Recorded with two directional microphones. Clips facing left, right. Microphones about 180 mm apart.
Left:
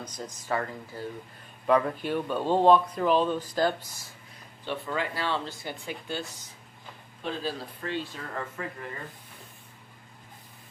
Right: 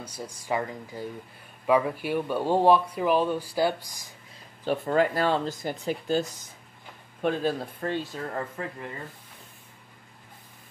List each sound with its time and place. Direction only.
0.0 s speech: 10° right (ahead or behind)
4.6 s speech: 45° right (ahead or behind)
7.2 s speech: 55° right (ahead or behind)